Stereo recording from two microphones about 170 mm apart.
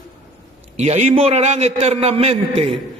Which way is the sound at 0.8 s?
45° right (ahead or behind).